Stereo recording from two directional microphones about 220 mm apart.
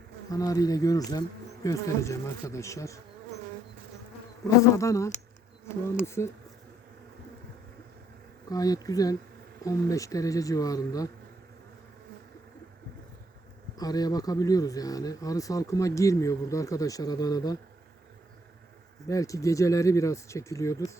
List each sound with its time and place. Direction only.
0.3 s speech: 15° left (ahead or behind)
4.8 s speech: 15° left (ahead or behind)
8.4 s speech: 15° left (ahead or behind)
13.7 s speech: 15° left (ahead or behind)
19.0 s speech: 15° left (ahead or behind)